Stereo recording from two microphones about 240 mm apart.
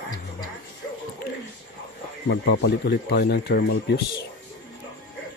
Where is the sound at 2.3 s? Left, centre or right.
Left.